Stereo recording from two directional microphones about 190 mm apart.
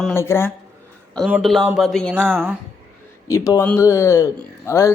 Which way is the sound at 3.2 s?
15° left (ahead or behind).